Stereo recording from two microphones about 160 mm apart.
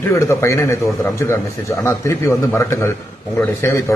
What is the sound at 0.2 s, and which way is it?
A man's voice, 20° left (ahead or behind).